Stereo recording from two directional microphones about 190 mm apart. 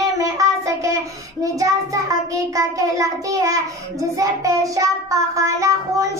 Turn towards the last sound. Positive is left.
turn(degrees=-15)  # may be behind; listen again after turning